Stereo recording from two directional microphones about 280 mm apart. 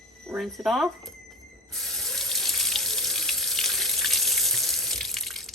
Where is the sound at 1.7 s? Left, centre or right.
Centre.